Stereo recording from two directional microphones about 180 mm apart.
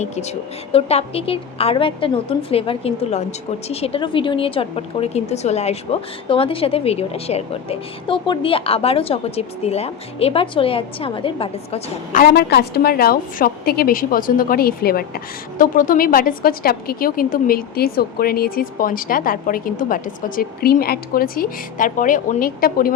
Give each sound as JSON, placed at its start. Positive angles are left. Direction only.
{"t": 0.0, "sound": "a woman's voice", "side_deg": 40}
{"t": 12.1, "sound": "a woman's voice", "side_deg": 60}